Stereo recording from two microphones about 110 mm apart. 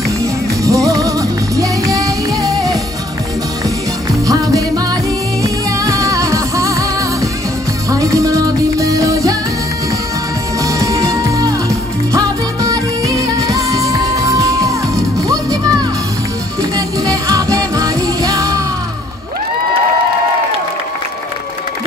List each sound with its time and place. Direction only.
0.2 s music: 30° right (ahead or behind)
4.3 s music: 30° right (ahead or behind)
7.9 s music: 30° right (ahead or behind)
10.6 s music: 30° right (ahead or behind)
16.7 s music: 30° right (ahead or behind)